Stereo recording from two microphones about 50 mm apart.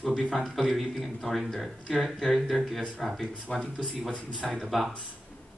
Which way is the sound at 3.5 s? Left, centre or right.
Left.